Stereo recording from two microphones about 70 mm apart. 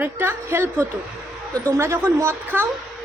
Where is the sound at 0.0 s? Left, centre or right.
Right.